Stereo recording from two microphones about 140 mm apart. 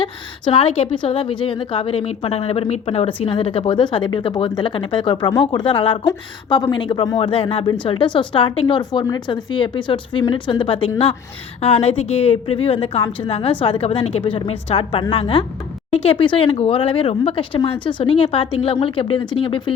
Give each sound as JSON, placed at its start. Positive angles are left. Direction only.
{"t": 0.0, "sound": "a woman's voice", "side_deg": 40}